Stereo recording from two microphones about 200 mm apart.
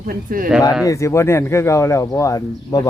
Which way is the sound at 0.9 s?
15° left (ahead or behind).